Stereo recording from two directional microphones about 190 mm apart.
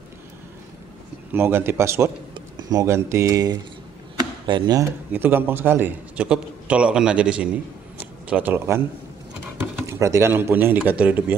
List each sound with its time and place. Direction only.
1.3 s speech: 10° right (ahead or behind)
9.8 s speech: 15° right (ahead or behind)